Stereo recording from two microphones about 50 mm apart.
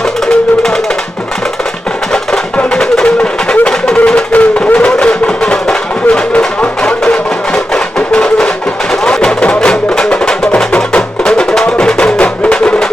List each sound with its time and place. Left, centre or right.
2.7 s music: centre
12.2 s music: left
12.5 s music: centre